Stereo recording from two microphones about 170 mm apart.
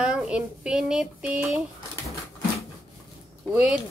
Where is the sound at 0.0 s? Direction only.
5° right (ahead or behind).